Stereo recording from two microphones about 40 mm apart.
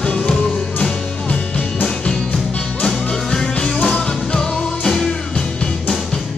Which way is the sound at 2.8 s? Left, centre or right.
Left.